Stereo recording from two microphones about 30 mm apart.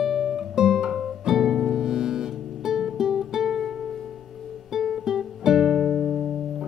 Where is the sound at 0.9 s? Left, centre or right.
Centre.